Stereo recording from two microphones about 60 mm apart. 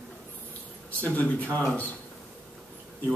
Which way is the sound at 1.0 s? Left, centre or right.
Left.